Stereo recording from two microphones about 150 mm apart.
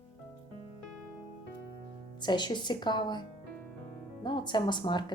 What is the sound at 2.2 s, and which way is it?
A woman's voice, 30° left (ahead or behind).